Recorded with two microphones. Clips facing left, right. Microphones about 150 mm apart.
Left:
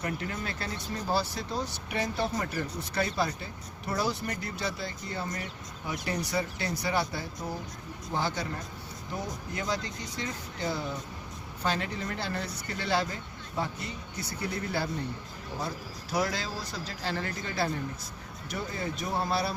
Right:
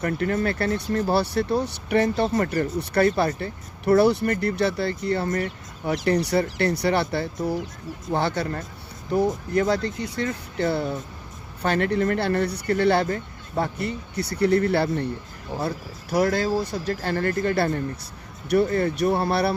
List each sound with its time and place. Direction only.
0.0 s speech: 60° right (ahead or behind)
15.6 s speech: 55° right (ahead or behind)